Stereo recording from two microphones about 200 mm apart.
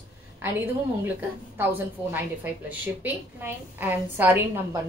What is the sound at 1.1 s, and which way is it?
A woman's voice, 10° right (ahead or behind).